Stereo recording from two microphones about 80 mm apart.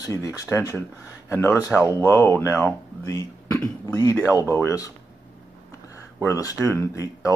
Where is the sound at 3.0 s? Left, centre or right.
Left.